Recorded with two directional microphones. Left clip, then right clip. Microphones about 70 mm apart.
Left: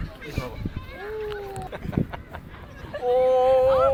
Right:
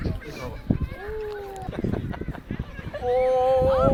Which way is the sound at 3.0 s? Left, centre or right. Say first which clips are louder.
Left 2 dB; left.